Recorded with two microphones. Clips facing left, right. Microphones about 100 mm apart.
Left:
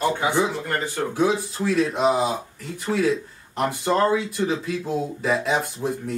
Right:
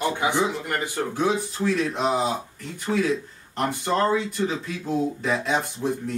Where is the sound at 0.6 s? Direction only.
15° right (ahead or behind).